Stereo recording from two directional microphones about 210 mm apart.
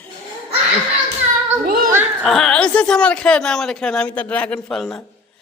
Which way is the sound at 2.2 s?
Centre (ahead or behind).